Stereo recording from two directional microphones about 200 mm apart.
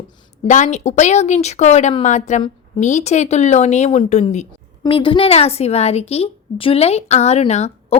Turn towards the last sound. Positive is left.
turn(degrees=35)  # may be behind; listen again after turning